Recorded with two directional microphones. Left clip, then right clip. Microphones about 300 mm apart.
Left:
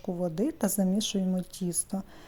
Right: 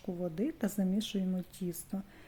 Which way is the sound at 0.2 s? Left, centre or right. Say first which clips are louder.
Left 6 dB; centre.